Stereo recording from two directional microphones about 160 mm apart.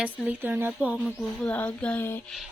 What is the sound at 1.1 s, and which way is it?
Speech, 5° left (ahead or behind).